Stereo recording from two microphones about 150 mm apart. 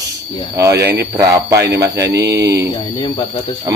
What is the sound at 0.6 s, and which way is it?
Speech, 20° right (ahead or behind).